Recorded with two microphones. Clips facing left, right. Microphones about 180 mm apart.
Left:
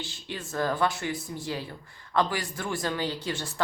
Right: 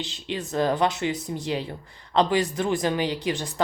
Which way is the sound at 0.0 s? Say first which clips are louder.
Right 6 dB; 20° right (ahead or behind).